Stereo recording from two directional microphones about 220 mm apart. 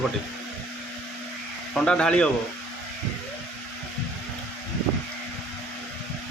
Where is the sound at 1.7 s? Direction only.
5° left (ahead or behind).